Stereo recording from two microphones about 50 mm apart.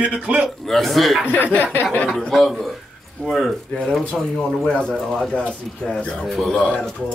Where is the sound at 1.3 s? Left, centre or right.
Left.